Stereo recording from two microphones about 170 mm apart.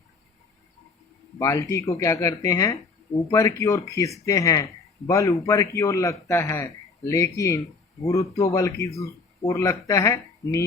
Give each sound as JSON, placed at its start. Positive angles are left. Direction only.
{"t": 1.4, "sound": "a man's voice", "side_deg": 20}